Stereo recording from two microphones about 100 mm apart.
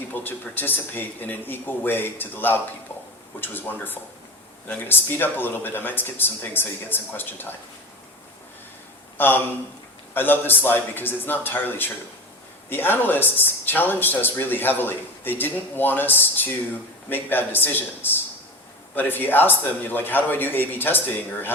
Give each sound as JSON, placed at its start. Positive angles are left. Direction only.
{"t": 0.1, "sound": "speech", "side_deg": 20}
{"t": 9.1, "sound": "speech", "side_deg": 20}